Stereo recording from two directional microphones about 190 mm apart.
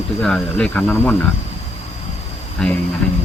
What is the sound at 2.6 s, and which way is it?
Speech, 5° left (ahead or behind).